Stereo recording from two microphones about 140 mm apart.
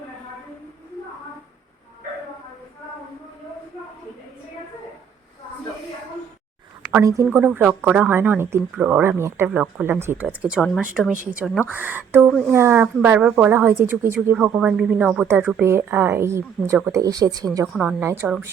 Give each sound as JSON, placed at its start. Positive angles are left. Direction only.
{"t": 7.0, "sound": "a woman's voice", "side_deg": -20}
{"t": 11.7, "sound": "a woman's voice", "side_deg": -15}